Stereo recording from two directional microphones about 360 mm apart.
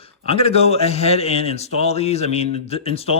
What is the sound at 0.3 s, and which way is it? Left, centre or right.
Speech, centre.